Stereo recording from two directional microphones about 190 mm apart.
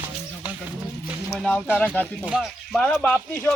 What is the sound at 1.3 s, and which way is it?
Speech, 5° left (ahead or behind).